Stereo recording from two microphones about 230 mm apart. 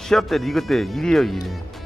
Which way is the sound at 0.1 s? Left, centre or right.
Centre.